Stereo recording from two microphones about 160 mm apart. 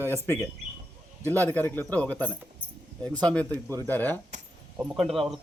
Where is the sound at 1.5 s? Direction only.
15° left (ahead or behind).